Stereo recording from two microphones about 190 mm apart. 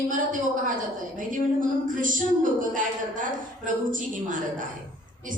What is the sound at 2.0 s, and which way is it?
A woman's voice, 45° right (ahead or behind).